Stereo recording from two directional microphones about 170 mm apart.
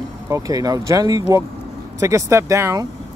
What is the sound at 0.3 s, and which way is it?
Speech, 20° right (ahead or behind).